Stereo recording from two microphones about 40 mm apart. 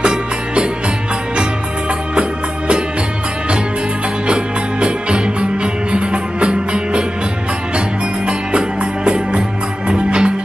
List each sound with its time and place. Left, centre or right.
0.0 s music: right
4.3 s music: right
8.3 s music: right